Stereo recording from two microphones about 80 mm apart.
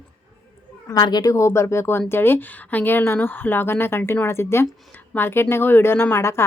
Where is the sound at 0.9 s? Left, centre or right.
Left.